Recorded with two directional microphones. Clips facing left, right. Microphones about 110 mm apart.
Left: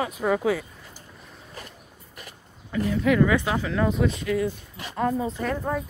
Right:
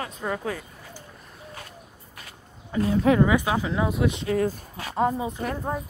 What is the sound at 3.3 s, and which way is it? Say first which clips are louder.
Speech: right 1 dB; 15° right (ahead or behind).